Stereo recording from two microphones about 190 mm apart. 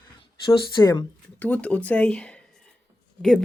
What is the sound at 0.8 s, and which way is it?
Speech, 25° left (ahead or behind).